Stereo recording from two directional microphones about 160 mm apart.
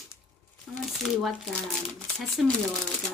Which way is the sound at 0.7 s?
Centre (ahead or behind).